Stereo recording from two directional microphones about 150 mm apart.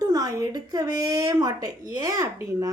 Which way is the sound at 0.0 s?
25° right (ahead or behind).